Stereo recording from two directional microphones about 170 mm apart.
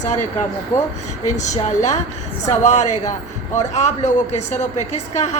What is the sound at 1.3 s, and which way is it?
A woman's voice, 45° left (ahead or behind).